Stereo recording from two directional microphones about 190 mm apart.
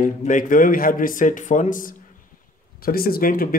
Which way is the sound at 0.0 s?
45° left (ahead or behind).